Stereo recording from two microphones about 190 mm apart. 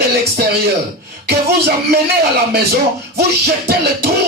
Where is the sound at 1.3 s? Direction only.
55° right (ahead or behind).